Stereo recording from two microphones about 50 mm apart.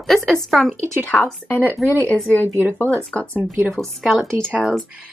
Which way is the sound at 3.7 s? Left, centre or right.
Centre.